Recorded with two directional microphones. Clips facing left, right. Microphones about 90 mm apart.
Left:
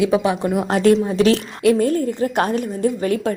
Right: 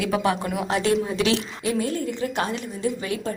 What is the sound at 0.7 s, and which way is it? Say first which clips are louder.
A woman's voice: left 7 dB; 45° left (ahead or behind).